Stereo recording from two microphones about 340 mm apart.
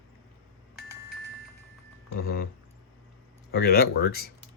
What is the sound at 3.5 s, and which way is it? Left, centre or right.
Speech, left.